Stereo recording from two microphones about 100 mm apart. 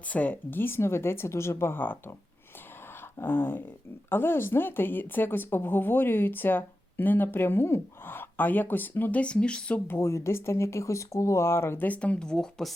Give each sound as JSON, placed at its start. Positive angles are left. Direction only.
{"t": 0.0, "sound": "speech", "side_deg": 15}
{"t": 3.0, "sound": "a sound", "side_deg": 20}
{"t": 4.1, "sound": "speech", "side_deg": 25}
{"t": 9.8, "sound": "speech", "side_deg": 25}